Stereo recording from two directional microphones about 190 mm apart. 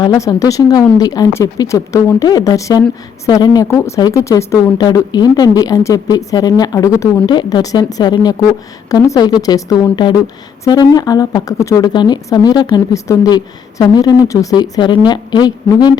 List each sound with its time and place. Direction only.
0.0 s a woman's voice: 20° left (ahead or behind)